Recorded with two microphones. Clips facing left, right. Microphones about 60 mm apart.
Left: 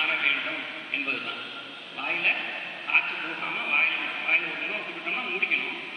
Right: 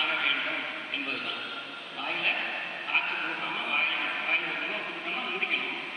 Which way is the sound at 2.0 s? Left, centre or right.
Left.